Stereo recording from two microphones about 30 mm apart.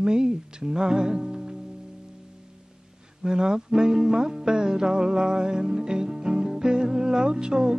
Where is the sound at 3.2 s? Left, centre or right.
Right.